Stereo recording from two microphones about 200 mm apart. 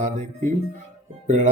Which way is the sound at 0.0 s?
35° right (ahead or behind).